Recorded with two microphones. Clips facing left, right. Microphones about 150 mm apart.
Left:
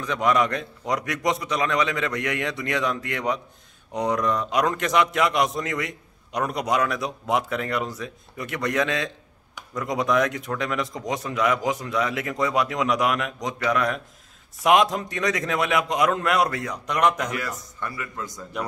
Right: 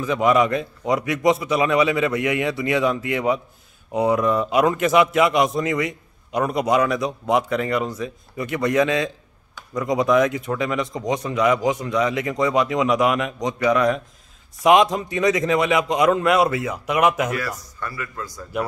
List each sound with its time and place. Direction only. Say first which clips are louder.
0.0 s a man's voice: right 4 dB; 5° right (ahead or behind)
17.7 s a man's voice: right 1 dB; 20° left (ahead or behind)